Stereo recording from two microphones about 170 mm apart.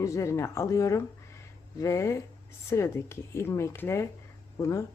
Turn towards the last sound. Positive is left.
turn(degrees=20)  # may be behind; listen again after turning